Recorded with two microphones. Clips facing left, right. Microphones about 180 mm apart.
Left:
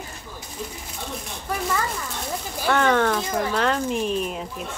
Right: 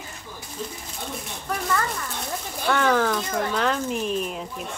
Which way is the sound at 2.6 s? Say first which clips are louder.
Left 1 dB; centre (ahead or behind).